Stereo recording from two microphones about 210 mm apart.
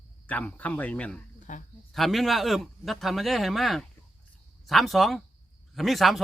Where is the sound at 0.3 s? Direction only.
5° left (ahead or behind).